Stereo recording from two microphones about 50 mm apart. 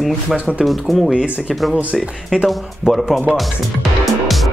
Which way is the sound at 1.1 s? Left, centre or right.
Right.